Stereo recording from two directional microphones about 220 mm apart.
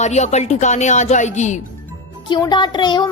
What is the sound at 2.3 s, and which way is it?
Speech, 20° left (ahead or behind).